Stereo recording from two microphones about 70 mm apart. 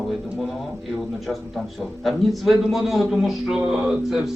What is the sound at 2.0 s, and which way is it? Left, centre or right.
A man's voice, centre.